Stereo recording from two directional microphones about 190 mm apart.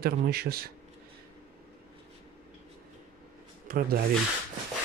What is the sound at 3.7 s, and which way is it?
Speech, 50° right (ahead or behind).